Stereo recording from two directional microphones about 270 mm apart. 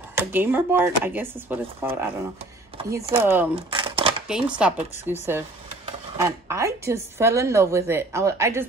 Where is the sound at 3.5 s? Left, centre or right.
Centre.